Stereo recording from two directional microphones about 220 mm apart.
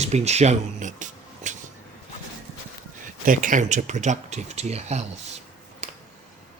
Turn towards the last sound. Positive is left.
turn(degrees=-30)  # may be behind; listen again after turning